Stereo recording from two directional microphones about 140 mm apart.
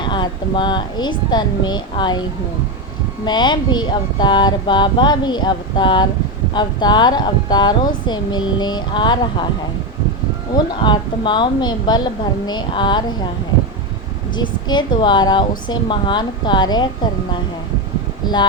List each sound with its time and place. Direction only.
0.0 s speech: 35° left (ahead or behind)
3.2 s speech: 30° left (ahead or behind)
10.5 s speech: 30° left (ahead or behind)
14.7 s speech: 30° left (ahead or behind)